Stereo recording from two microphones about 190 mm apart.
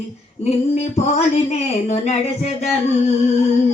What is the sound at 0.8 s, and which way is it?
Speech, 35° left (ahead or behind).